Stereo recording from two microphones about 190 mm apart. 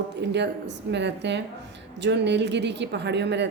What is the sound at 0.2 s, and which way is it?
A woman's voice, 65° right (ahead or behind).